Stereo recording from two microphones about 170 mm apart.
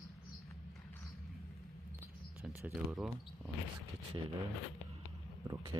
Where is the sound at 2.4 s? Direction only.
Centre (ahead or behind).